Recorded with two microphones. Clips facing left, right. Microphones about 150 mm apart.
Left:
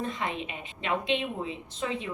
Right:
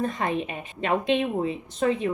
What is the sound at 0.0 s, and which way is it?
A woman's voice, 45° right (ahead or behind).